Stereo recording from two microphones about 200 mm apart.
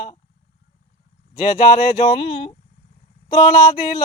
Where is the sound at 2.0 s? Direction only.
25° left (ahead or behind).